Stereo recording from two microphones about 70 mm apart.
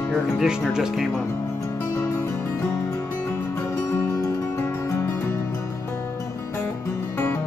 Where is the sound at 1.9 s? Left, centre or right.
Left.